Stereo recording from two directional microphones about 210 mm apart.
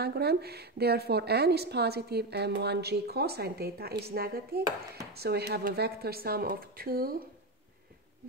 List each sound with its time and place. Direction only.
0.0 s a woman's voice: 50° right (ahead or behind)